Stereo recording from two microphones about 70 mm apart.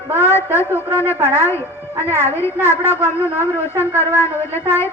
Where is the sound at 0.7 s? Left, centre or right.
Left.